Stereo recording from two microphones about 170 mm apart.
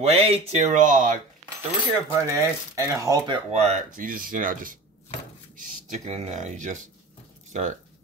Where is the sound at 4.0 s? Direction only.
55° right (ahead or behind).